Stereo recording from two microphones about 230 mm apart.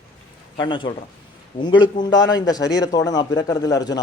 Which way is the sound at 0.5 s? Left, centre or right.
Left.